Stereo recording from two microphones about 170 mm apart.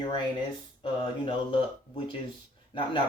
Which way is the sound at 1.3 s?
30° left (ahead or behind).